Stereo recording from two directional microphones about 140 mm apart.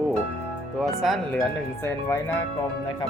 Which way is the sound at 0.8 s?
Centre (ahead or behind).